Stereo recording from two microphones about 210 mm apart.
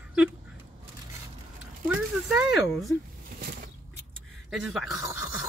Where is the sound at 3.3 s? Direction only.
45° right (ahead or behind).